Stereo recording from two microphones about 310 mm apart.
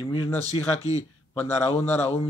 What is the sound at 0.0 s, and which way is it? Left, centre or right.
Speech, centre.